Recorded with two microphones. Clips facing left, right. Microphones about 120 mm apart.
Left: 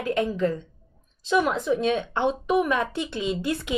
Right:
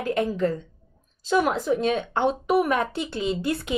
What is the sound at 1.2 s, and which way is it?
Speech, 40° right (ahead or behind).